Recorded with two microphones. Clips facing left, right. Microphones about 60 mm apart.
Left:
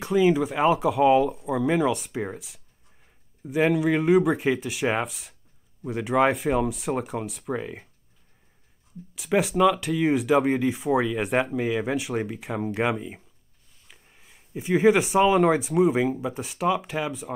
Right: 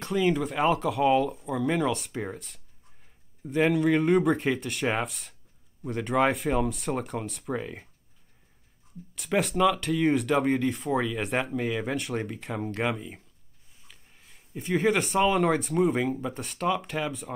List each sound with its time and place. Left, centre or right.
0.0 s speech: centre
9.1 s speech: centre